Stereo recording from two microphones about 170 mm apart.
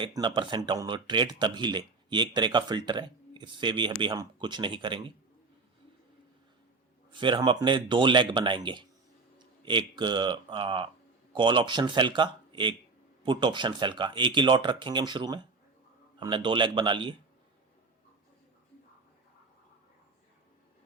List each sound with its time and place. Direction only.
0.0 s speech: 25° right (ahead or behind)
7.1 s speech: 30° right (ahead or behind)